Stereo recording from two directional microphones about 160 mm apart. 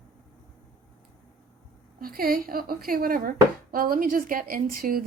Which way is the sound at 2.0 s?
65° right (ahead or behind).